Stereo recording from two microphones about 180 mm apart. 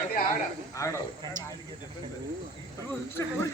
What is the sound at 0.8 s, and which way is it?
Speech, 15° left (ahead or behind).